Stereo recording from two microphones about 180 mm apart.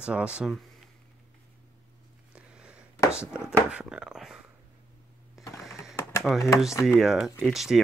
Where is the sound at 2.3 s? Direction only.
5° right (ahead or behind).